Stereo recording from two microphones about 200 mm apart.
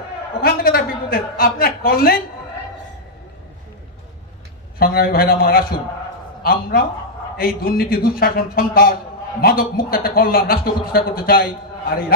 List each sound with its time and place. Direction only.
0.4 s a man's voice: 50° left (ahead or behind)
4.7 s a man's voice: 50° left (ahead or behind)